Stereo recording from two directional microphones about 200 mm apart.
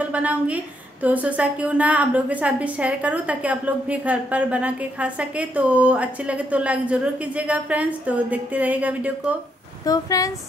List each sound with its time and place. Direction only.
0.1 s a woman's voice: 5° right (ahead or behind)
9.8 s speech: 15° left (ahead or behind)